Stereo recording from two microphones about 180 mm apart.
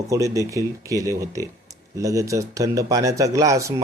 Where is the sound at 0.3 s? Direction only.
15° right (ahead or behind).